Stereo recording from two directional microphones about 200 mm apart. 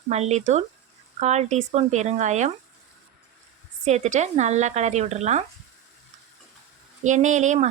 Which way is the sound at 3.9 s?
35° right (ahead or behind).